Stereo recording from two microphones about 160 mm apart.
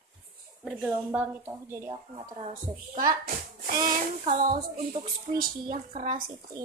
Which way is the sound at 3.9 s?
60° right (ahead or behind).